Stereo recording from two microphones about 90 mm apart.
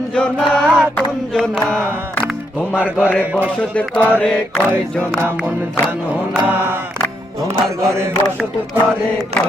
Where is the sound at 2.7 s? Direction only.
20° left (ahead or behind).